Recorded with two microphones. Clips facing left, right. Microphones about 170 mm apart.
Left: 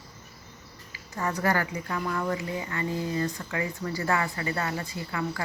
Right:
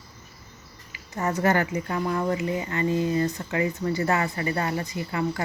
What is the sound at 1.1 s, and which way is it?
Speech, 20° right (ahead or behind).